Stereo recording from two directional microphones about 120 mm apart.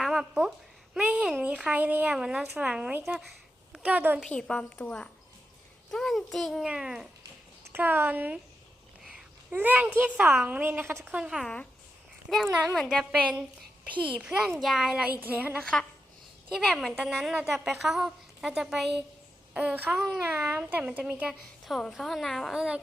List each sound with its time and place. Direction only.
0.0 s a sound: 5° right (ahead or behind)
0.9 s a woman's voice: 10° right (ahead or behind)
4.3 s a woman's voice: 10° left (ahead or behind)
7.7 s a woman's voice: 15° right (ahead or behind)
9.5 s a woman's voice: 15° right (ahead or behind)
11.2 s a woman's voice: 5° right (ahead or behind)
11.4 s a woman's voice: 10° left (ahead or behind)
12.7 s a woman's voice: 5° left (ahead or behind)
14.0 s a woman's voice: 10° right (ahead or behind)
15.6 s a woman's voice: 5° left (ahead or behind); by 21.3 s 10° right (ahead or behind)
21.6 s a woman's voice: centre (ahead or behind)